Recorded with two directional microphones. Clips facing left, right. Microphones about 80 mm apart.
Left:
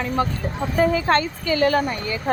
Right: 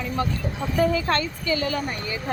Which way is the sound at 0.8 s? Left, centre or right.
Left.